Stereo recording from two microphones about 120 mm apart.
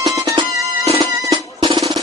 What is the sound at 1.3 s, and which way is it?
Music, 35° right (ahead or behind).